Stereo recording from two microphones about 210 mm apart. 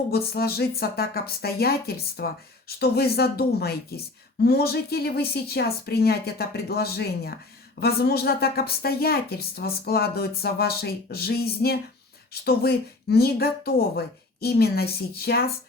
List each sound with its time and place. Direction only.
0.1 s a woman's voice: 50° left (ahead or behind)